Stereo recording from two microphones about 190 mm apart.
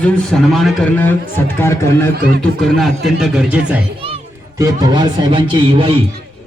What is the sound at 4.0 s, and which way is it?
Music, 30° right (ahead or behind).